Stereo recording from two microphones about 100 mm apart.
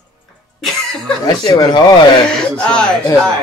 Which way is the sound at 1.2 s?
40° left (ahead or behind).